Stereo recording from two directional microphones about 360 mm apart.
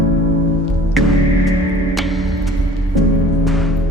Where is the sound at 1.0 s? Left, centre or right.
Centre.